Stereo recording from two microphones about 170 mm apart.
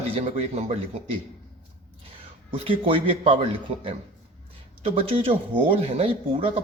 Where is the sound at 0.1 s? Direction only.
35° right (ahead or behind).